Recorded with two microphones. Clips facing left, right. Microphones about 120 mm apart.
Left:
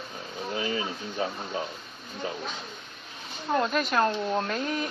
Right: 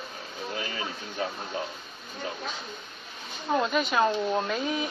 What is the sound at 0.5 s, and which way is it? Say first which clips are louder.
Speech: left 6 dB; 25° left (ahead or behind).